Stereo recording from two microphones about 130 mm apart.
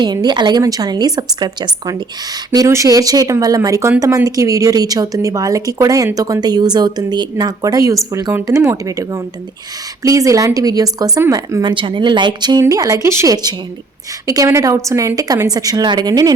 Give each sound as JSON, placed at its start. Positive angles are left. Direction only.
{"t": 0.0, "sound": "a woman's voice", "side_deg": -35}